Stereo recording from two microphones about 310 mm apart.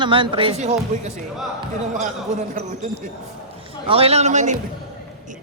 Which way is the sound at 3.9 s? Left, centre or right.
Centre.